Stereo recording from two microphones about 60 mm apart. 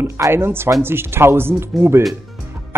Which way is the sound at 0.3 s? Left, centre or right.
Right.